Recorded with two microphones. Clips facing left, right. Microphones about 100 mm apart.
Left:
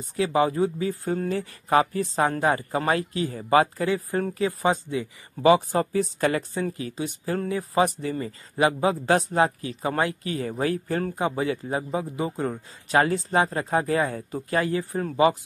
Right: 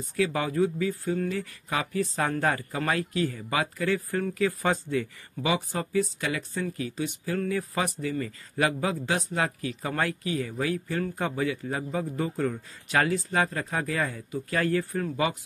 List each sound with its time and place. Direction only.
0.1 s speech: 25° left (ahead or behind)
3.3 s speech: 35° left (ahead or behind)
3.8 s speech: 20° left (ahead or behind)
5.4 s speech: 35° left (ahead or behind)
9.0 s speech: 45° left (ahead or behind)
9.4 s speech: 25° left (ahead or behind)
10.2 s speech: 40° left (ahead or behind)
11.1 s speech: 20° left (ahead or behind)
14.5 s speech: 20° left (ahead or behind)